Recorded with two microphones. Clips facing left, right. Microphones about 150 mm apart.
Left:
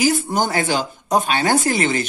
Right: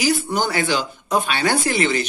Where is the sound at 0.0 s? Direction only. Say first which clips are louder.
Left 2 dB; 45° left (ahead or behind).